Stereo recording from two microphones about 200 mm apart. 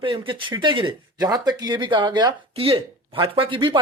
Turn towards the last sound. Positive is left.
turn(degrees=-25)  # may be behind; listen again after turning